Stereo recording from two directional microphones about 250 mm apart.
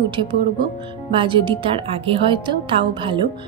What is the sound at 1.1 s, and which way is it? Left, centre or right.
A woman's voice, centre.